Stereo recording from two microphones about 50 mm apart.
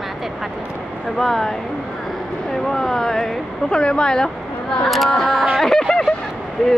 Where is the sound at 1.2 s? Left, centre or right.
Centre.